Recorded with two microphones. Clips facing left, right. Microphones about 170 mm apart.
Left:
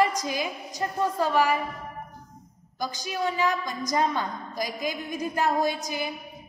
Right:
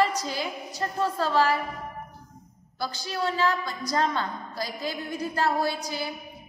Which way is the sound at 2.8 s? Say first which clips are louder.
Left 1 dB; 15° left (ahead or behind).